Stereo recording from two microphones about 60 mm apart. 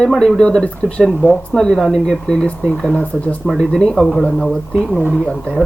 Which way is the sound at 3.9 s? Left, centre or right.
Centre.